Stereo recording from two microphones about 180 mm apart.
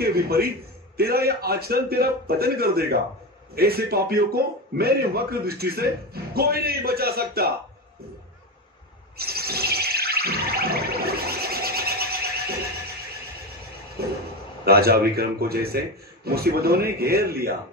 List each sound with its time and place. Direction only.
0.0 s a man's voice: 60° right (ahead or behind)
9.1 s chirp tone: 60° right (ahead or behind)
14.0 s vehicle: 60° right (ahead or behind)
14.6 s a man's voice: 60° right (ahead or behind)